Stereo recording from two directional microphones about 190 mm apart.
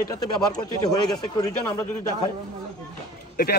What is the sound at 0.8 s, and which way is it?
Speech, 20° left (ahead or behind).